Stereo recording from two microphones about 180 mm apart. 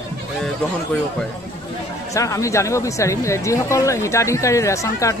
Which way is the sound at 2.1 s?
15° left (ahead or behind).